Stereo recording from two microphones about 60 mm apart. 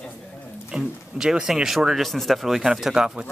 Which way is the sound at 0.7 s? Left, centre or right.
Centre.